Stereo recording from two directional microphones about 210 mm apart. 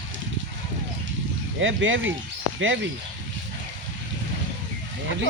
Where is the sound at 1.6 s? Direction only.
65° right (ahead or behind).